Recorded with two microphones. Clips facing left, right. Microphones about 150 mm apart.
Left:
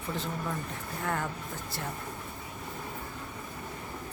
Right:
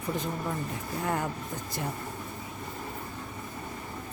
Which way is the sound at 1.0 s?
20° right (ahead or behind).